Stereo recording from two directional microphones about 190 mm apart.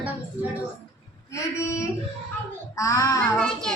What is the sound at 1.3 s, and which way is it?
A woman's voice, 15° left (ahead or behind).